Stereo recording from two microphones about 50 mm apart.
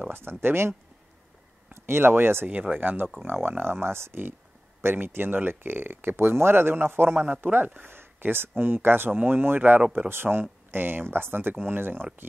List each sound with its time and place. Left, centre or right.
0.0 s speech: right
7.2 s speech: right
7.9 s speech: right